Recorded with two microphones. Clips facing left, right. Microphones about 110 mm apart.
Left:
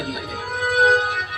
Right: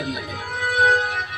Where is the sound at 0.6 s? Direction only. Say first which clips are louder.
Left 1 dB; 50° left (ahead or behind).